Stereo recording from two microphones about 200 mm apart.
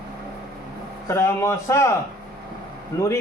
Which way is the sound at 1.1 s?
15° left (ahead or behind).